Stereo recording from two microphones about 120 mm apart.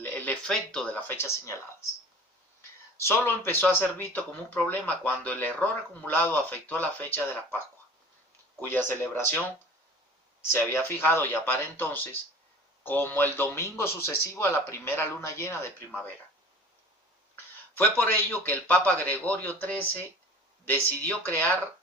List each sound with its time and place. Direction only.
0.0 s speech: 15° left (ahead or behind)
3.0 s a man's voice: 20° left (ahead or behind)
8.6 s a man's voice: 15° left (ahead or behind)
10.5 s a man's voice: 20° left (ahead or behind)
17.3 s a man's voice: 15° left (ahead or behind)